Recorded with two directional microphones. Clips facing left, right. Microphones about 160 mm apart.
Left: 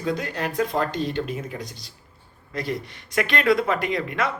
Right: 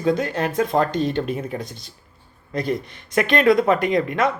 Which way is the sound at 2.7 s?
50° right (ahead or behind).